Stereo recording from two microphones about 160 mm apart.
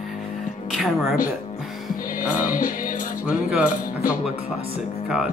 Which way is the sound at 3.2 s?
10° right (ahead or behind).